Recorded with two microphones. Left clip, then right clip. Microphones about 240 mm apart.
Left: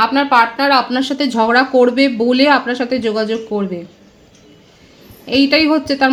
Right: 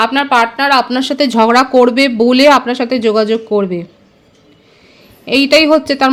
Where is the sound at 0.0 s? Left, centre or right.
Right.